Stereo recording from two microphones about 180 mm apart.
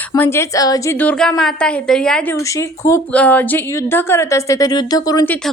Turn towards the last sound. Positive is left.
turn(degrees=10)  # may be behind; listen again after turning